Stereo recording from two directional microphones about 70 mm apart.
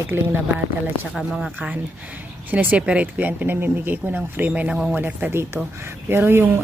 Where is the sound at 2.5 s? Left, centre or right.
Right.